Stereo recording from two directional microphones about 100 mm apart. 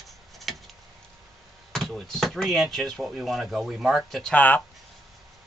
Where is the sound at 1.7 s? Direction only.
5° left (ahead or behind).